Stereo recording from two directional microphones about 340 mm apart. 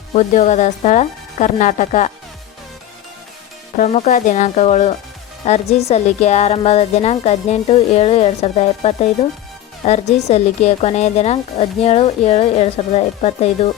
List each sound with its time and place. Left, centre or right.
0.1 s speech: centre
3.8 s speech: centre